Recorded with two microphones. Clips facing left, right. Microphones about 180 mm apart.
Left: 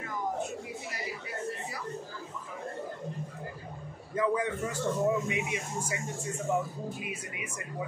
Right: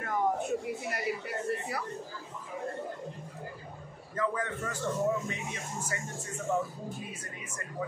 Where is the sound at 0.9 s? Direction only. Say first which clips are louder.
Right 4 dB; 60° right (ahead or behind).